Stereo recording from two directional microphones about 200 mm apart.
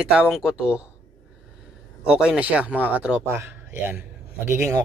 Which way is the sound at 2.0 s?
5° right (ahead or behind).